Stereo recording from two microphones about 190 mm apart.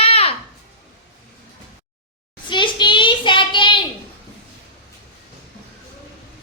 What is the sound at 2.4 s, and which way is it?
Child singing, 25° left (ahead or behind).